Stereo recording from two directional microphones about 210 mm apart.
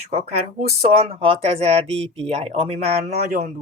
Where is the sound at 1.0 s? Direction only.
25° right (ahead or behind).